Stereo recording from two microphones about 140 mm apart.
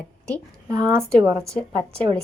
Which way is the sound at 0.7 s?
25° right (ahead or behind).